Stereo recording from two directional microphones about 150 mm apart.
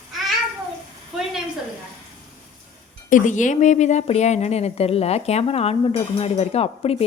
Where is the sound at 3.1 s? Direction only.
55° left (ahead or behind).